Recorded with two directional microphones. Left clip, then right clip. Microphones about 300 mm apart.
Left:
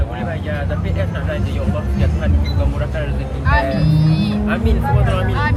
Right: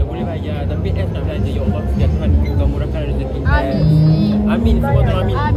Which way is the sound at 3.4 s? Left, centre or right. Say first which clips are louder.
Left 2 dB; left.